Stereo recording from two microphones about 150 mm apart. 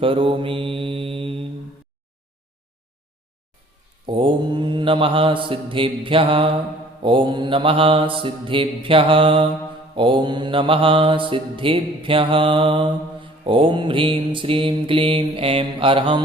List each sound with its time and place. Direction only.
0.0 s mantra: 35° right (ahead or behind)
4.0 s mantra: 35° right (ahead or behind)